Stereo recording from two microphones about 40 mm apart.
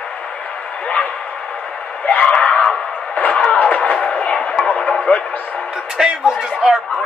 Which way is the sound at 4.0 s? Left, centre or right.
Left.